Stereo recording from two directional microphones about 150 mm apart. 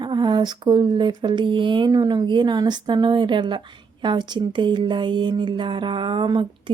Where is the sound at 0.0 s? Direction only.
30° right (ahead or behind).